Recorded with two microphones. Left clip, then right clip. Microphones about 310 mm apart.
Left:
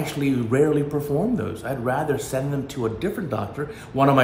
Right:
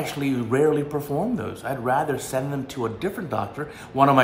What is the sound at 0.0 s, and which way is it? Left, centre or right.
Speech, centre.